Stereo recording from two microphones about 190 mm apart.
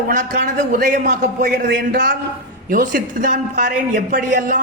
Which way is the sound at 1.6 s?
60° right (ahead or behind).